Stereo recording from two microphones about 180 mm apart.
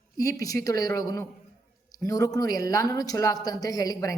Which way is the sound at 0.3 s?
20° left (ahead or behind).